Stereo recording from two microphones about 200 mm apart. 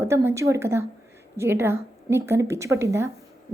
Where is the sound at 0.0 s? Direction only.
15° right (ahead or behind).